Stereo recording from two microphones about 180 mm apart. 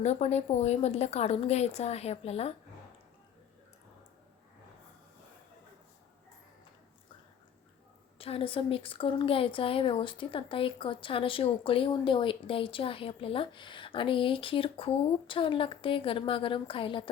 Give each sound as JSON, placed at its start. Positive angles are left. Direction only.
{"t": 0.0, "sound": "a woman's voice", "side_deg": 40}
{"t": 8.2, "sound": "a woman's voice", "side_deg": 30}